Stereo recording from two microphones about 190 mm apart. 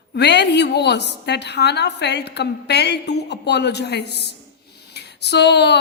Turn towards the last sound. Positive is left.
turn(degrees=60)  # may be behind; listen again after turning